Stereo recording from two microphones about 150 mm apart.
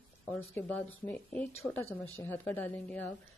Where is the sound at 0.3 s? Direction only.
10° left (ahead or behind).